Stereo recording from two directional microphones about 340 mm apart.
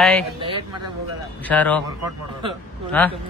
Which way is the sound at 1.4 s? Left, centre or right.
Centre.